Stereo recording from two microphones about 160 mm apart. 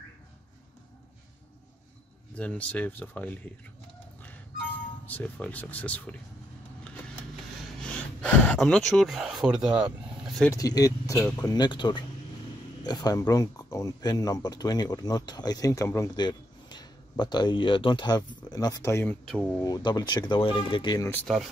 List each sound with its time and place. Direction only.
2.3 s speech: 10° left (ahead or behind)
5.0 s speech: 10° left (ahead or behind)
7.8 s speech: 5° left (ahead or behind)
10.5 s speech: 20° left (ahead or behind)
19.2 s speech: centre (ahead or behind)
19.6 s speech: 25° left (ahead or behind)
21.1 s speech: 5° left (ahead or behind)